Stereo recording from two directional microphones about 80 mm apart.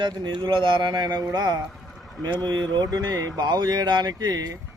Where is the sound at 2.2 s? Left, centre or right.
Centre.